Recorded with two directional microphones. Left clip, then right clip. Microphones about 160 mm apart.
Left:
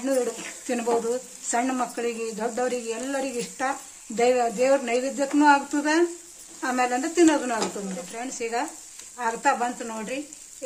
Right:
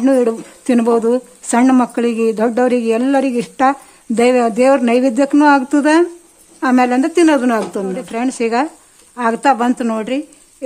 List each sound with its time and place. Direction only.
0.0 s speech: 70° right (ahead or behind)
7.7 s speech: 90° right